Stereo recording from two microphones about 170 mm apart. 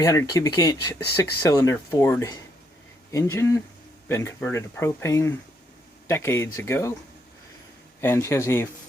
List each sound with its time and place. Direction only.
0.0 s speech: 15° left (ahead or behind)
8.0 s speech: 15° left (ahead or behind)